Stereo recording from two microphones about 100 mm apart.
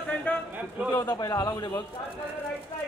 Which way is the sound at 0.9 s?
45° left (ahead or behind).